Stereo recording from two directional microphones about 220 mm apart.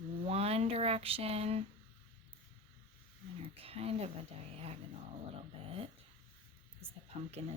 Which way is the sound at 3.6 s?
25° right (ahead or behind).